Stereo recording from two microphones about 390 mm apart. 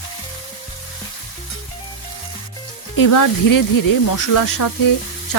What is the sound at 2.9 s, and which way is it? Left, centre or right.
Speech, left.